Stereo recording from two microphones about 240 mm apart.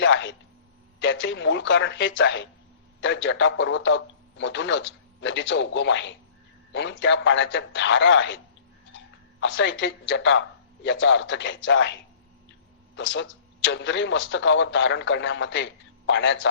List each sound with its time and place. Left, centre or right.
0.0 s a sound: left
0.9 s speech: left
9.4 s speech: left
13.0 s speech: left